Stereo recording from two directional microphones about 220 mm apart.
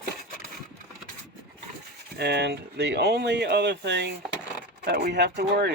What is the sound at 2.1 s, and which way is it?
Speech, 50° right (ahead or behind).